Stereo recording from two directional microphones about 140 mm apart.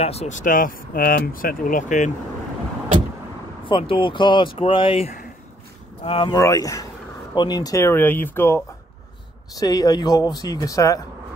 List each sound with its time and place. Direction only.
0.0 s speech: 50° left (ahead or behind)
3.6 s speech: 40° left (ahead or behind)
6.3 s speech: 25° left (ahead or behind)